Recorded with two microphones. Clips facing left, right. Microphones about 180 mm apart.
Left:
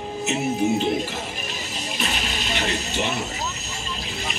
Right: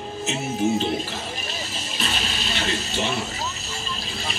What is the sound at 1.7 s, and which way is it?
Speech, 15° left (ahead or behind).